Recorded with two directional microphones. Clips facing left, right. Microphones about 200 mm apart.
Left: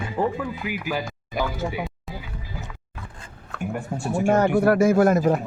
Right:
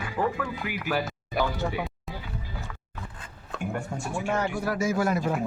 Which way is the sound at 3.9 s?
35° left (ahead or behind).